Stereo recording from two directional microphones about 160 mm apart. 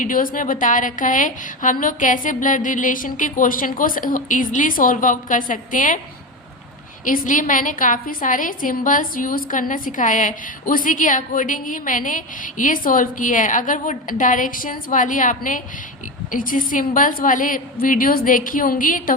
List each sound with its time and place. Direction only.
0.0 s a woman's voice: 60° left (ahead or behind)
7.0 s a woman's voice: 55° left (ahead or behind)